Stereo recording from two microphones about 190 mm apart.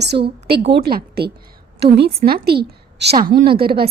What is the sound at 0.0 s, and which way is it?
A woman's voice, 60° right (ahead or behind).